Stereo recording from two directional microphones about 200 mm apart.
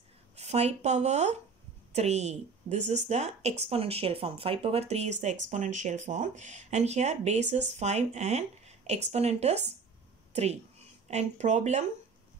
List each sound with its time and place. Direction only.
0.4 s speech: 30° right (ahead or behind)